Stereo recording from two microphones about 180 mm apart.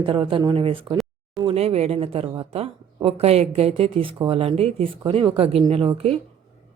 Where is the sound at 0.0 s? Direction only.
30° right (ahead or behind).